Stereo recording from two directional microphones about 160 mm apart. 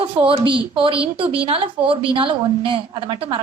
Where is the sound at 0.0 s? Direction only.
35° right (ahead or behind).